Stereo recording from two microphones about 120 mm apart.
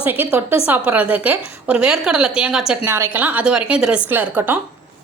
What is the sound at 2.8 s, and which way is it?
Speech, 20° right (ahead or behind).